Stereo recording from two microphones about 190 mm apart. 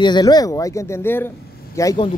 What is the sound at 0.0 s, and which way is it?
Speech, 20° left (ahead or behind).